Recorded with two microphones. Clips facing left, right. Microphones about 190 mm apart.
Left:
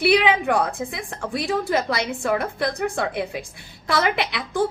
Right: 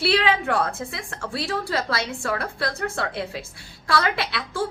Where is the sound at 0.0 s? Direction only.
15° left (ahead or behind).